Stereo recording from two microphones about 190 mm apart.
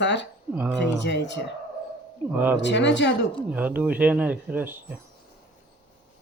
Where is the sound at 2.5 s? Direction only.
70° left (ahead or behind).